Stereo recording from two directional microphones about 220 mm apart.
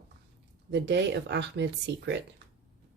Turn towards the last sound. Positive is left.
turn(degrees=-55)  # may be behind; listen again after turning